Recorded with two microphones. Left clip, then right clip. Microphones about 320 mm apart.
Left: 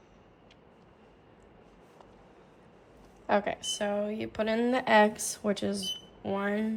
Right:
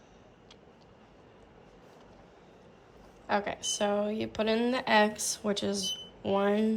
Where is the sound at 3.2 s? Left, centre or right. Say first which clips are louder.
Left 2 dB; centre.